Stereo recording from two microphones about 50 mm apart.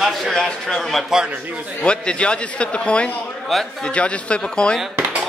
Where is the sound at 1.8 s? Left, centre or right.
Centre.